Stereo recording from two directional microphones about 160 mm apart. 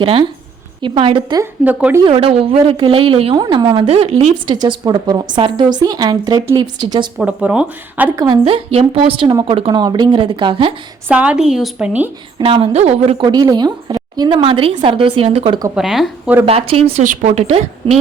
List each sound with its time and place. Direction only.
0.0 s a woman's voice: 30° right (ahead or behind)
1.4 s speech: 15° right (ahead or behind)
2.0 s a woman's voice: 35° right (ahead or behind)
3.3 s a woman's voice: 25° right (ahead or behind); by 4.5 s 40° right (ahead or behind)
4.5 s a woman's voice: 25° right (ahead or behind)
7.2 s speech: 10° right (ahead or behind)
8.2 s a woman's voice: 30° right (ahead or behind)
11.1 s speech: 5° right (ahead or behind)
12.4 s a woman's voice: 35° right (ahead or behind)
15.7 s speech: centre (ahead or behind)
16.5 s a woman's voice: 35° right (ahead or behind)
17.0 s a woman's voice: 50° right (ahead or behind)